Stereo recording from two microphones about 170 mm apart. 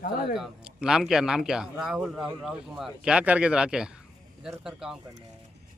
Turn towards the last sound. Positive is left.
turn(degrees=0)  # may be behind; listen again after turning